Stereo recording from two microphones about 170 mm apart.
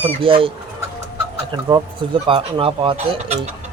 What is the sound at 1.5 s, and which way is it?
Speech, 25° right (ahead or behind).